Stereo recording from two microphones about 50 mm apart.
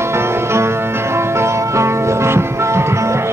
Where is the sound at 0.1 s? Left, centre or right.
Right.